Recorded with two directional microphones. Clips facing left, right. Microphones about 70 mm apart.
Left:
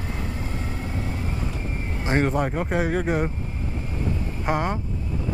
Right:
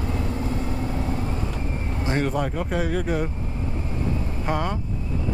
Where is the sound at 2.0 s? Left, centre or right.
Left.